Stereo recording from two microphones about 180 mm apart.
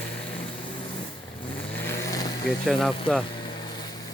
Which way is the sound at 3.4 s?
25° left (ahead or behind).